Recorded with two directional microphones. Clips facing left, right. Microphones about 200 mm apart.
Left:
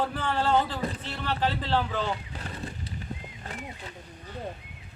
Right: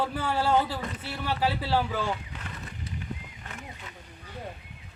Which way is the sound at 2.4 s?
30° left (ahead or behind).